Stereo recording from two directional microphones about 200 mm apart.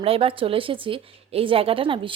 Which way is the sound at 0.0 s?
30° right (ahead or behind).